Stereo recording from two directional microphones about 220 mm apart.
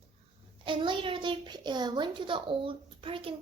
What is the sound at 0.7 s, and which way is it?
A child's voice, 20° right (ahead or behind).